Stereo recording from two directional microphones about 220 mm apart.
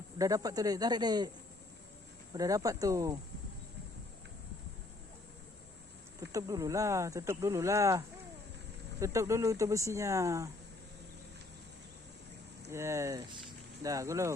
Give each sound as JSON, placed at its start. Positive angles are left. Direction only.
{"t": 0.2, "sound": "speech", "side_deg": -15}
{"t": 2.3, "sound": "speech", "side_deg": -15}
{"t": 6.1, "sound": "speech", "side_deg": -15}
{"t": 12.7, "sound": "speech", "side_deg": -10}